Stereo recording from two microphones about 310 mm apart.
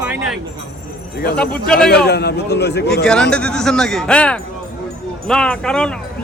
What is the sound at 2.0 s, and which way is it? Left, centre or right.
Speech, left.